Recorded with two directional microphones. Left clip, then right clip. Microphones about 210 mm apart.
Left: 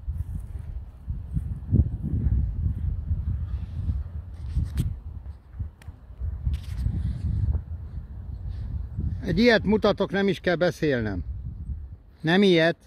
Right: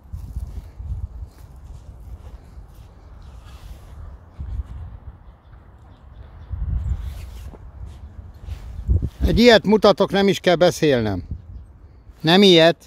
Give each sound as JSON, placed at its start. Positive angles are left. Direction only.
{"t": 9.2, "sound": "speech", "side_deg": -15}